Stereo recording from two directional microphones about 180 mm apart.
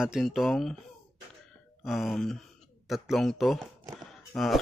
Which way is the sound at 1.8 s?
Centre (ahead or behind).